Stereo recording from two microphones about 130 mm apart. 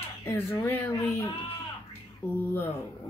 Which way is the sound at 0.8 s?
15° left (ahead or behind).